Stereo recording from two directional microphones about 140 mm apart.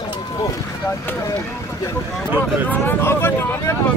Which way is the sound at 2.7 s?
15° left (ahead or behind).